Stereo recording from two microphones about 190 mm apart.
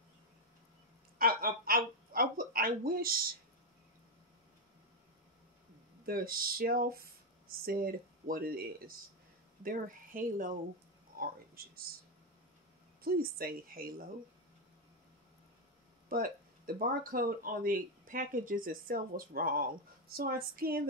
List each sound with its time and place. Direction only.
1.1 s a sound: 50° right (ahead or behind)
6.0 s speech: 50° right (ahead or behind)
13.0 s speech: 50° right (ahead or behind)
16.1 s speech: 50° right (ahead or behind)